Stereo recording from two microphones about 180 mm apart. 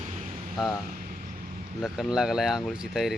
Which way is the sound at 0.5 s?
Centre (ahead or behind).